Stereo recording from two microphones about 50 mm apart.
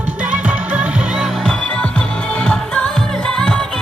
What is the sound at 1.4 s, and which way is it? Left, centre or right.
Music, centre.